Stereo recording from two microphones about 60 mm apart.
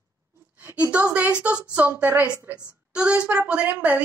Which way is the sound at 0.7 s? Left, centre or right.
Right.